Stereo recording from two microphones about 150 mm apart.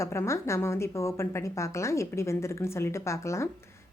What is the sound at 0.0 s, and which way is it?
Speech, 20° left (ahead or behind).